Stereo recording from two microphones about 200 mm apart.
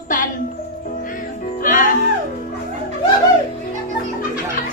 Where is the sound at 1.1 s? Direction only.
45° left (ahead or behind).